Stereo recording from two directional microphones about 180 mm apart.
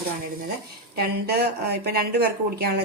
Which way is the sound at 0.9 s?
60° right (ahead or behind).